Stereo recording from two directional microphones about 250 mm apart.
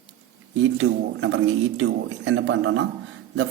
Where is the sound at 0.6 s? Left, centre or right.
Right.